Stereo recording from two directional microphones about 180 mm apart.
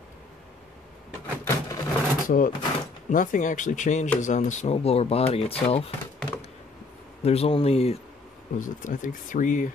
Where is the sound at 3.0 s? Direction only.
45° left (ahead or behind).